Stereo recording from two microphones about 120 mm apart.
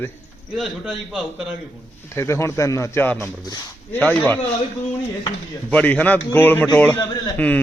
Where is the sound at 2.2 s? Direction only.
25° left (ahead or behind).